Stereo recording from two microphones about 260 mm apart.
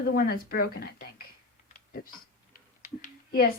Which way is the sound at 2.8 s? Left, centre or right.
Left.